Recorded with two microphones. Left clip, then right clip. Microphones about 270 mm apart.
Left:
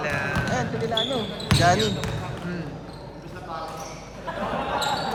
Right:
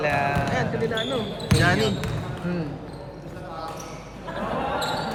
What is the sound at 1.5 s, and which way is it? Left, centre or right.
Speech, centre.